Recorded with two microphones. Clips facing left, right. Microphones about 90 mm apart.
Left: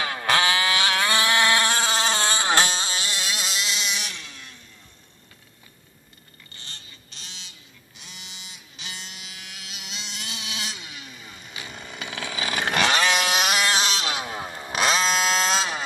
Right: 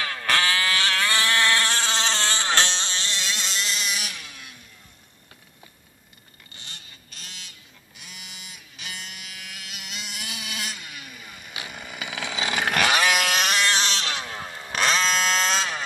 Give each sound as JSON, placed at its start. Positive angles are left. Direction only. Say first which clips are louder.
{"t": 0.0, "sound": "vehicle", "louder": "left 2 dB", "side_deg": 20}
{"t": 6.5, "sound": "vehicle", "louder": "even", "side_deg": -15}
{"t": 8.0, "sound": "electric shaver", "louder": "right 1 dB", "side_deg": -5}
{"t": 11.6, "sound": "chainsaw", "louder": "even", "side_deg": -10}
{"t": 12.6, "sound": "chainsaw", "louder": "even", "side_deg": -5}
{"t": 13.2, "sound": "vehicle", "louder": "left 1 dB", "side_deg": 5}